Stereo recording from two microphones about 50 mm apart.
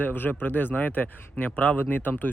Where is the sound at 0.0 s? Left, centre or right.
Left.